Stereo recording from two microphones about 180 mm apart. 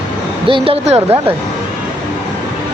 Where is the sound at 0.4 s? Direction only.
30° right (ahead or behind).